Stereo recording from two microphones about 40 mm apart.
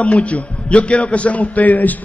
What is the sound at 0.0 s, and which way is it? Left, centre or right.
A man's voice, left.